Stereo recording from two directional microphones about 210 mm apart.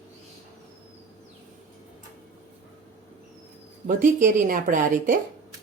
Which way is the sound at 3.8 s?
40° right (ahead or behind).